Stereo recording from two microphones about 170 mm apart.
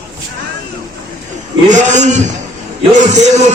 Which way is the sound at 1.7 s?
45° right (ahead or behind).